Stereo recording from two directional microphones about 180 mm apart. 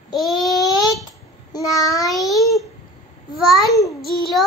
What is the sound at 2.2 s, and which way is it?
Babbling, centre (ahead or behind).